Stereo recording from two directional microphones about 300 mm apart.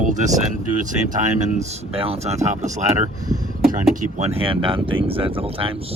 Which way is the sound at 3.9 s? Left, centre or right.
Centre.